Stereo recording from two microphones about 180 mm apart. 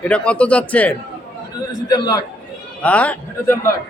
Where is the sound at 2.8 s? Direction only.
10° left (ahead or behind).